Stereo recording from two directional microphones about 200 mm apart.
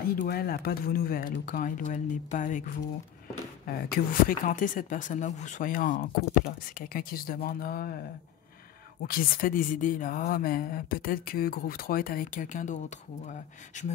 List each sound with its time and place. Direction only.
0.2 s speech: 50° left (ahead or behind)
9.0 s speech: 45° left (ahead or behind)